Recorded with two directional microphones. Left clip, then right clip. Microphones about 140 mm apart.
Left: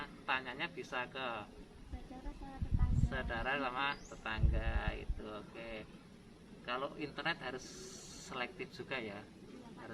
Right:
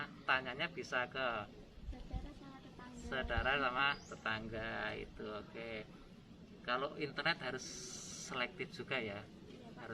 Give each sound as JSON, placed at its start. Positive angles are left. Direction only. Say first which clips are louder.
{"t": 0.0, "sound": "a man's voice", "louder": "right 2 dB", "side_deg": 15}
{"t": 3.1, "sound": "speech", "louder": "right 2 dB", "side_deg": 15}